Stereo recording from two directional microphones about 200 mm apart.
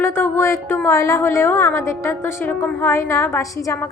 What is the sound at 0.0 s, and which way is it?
A woman's voice, 10° left (ahead or behind).